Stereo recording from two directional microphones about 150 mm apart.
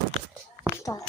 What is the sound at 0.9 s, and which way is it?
Speech, 25° left (ahead or behind).